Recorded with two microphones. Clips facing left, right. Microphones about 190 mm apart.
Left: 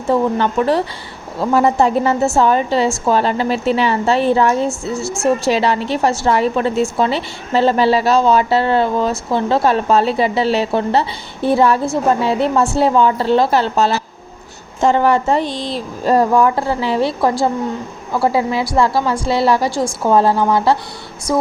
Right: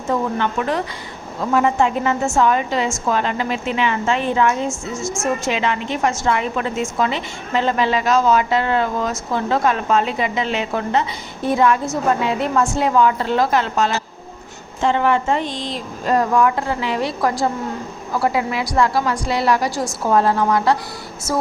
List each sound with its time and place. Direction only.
0.1 s a woman's voice: 35° left (ahead or behind)